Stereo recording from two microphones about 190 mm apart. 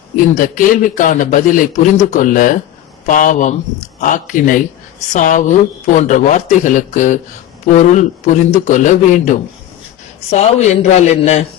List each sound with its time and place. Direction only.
0.3 s a man's voice: 45° left (ahead or behind)